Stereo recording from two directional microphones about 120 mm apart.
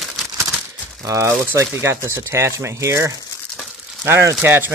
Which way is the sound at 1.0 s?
25° right (ahead or behind).